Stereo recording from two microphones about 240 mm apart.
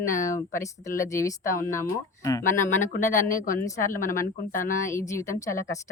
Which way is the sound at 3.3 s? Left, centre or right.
Left.